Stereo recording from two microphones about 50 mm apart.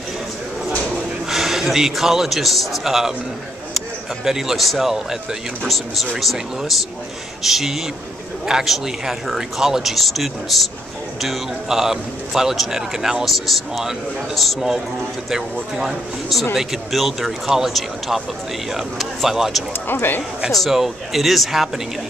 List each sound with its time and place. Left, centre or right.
0.9 s a man's voice: centre
4.2 s speech: centre
15.7 s speech: centre
19.9 s speech: left
20.7 s speech: centre